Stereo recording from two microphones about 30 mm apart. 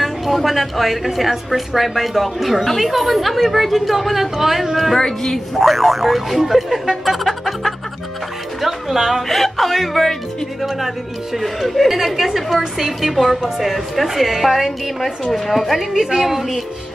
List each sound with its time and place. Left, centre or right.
0.0 s a woman's voice: centre
5.0 s a woman's voice: centre
5.5 s a woman's voice: centre
7.1 s music: centre
8.5 s a woman's voice: centre
11.3 s a woman's voice: centre
11.9 s a woman's voice: centre
13.1 s a woman's voice: centre